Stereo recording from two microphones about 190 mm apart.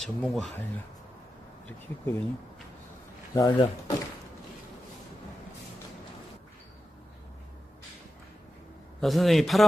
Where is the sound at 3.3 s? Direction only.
20° left (ahead or behind).